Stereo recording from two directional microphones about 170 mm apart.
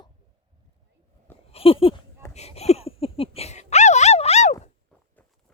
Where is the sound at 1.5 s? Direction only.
35° left (ahead or behind).